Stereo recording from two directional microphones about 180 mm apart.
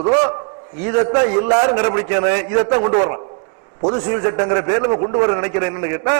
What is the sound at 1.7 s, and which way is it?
A man's voice, 15° right (ahead or behind).